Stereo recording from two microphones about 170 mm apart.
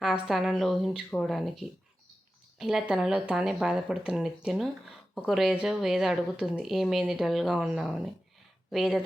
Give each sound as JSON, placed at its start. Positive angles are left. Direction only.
{"t": 0.0, "sound": "speech", "side_deg": -5}